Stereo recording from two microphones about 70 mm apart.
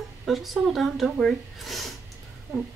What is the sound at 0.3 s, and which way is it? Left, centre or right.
Speech, centre.